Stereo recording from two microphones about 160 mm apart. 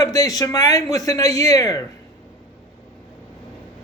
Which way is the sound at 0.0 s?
20° left (ahead or behind).